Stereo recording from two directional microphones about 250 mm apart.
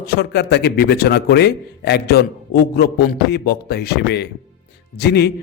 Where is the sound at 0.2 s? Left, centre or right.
Left.